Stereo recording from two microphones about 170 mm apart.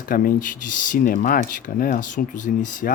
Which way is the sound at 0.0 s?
55° left (ahead or behind).